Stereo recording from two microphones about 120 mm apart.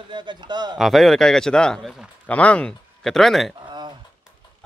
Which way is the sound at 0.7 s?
Centre (ahead or behind).